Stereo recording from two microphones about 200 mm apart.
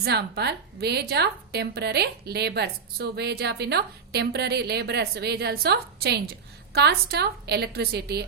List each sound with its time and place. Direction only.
0.0 s a woman's voice: 55° right (ahead or behind)